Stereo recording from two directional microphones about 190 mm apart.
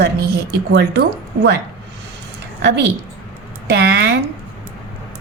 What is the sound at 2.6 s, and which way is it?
A woman's voice, 65° right (ahead or behind).